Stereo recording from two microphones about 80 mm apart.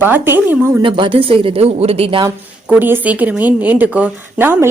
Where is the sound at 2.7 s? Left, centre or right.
Right.